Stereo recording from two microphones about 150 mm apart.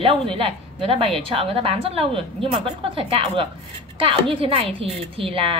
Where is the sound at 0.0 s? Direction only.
35° right (ahead or behind).